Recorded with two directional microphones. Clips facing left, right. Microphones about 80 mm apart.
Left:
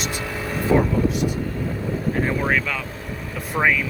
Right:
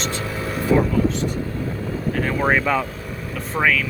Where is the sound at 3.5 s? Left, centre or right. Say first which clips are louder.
Even; centre.